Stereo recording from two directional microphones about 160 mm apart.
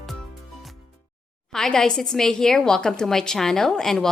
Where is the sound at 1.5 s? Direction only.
5° left (ahead or behind).